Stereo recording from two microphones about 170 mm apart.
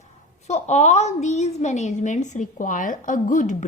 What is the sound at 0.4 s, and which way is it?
A woman's voice, 40° left (ahead or behind).